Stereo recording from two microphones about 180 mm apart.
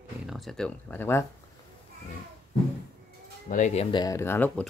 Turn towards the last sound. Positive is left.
turn(degrees=10)  # may be behind; listen again after turning